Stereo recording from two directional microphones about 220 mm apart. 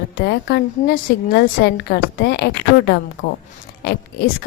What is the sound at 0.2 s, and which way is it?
A woman's voice, 45° left (ahead or behind).